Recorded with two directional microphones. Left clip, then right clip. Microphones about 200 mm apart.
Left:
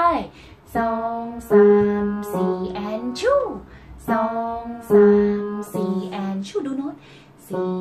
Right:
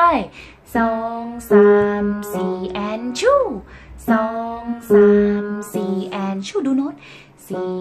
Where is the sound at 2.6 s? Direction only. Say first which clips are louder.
Right 3 dB; 45° right (ahead or behind).